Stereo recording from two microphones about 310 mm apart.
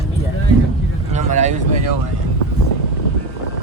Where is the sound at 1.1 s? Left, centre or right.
Right.